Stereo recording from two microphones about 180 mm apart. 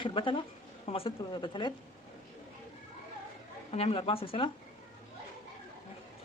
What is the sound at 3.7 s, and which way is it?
Speech, 30° left (ahead or behind).